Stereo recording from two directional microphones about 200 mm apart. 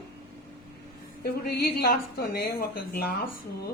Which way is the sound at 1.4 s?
50° left (ahead or behind).